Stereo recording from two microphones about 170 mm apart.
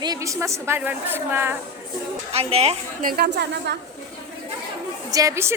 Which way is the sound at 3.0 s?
65° right (ahead or behind).